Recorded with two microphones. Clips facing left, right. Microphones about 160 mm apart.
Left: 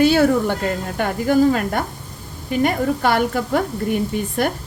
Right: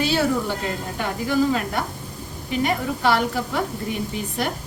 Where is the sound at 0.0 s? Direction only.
55° left (ahead or behind).